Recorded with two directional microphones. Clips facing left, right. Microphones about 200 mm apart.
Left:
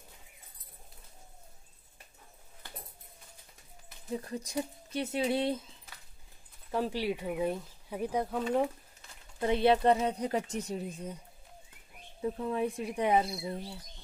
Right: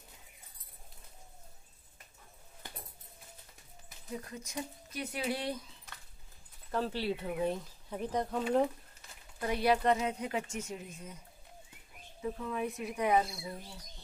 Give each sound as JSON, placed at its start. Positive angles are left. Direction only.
{"t": 4.2, "sound": "speech", "side_deg": 35}
{"t": 6.7, "sound": "speech", "side_deg": 15}
{"t": 9.4, "sound": "speech", "side_deg": 25}
{"t": 12.2, "sound": "speech", "side_deg": 30}